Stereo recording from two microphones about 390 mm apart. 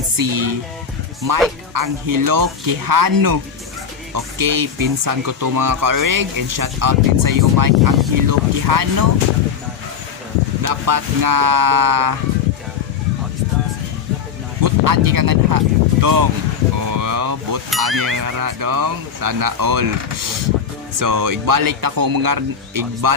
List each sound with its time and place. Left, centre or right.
0.2 s speech: right
10.6 s speech: right
14.6 s speech: right
16.7 s vehicle: right
17.8 s speech: right
21.0 s speech: right